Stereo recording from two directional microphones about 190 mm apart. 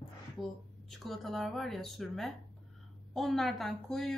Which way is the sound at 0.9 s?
Centre (ahead or behind).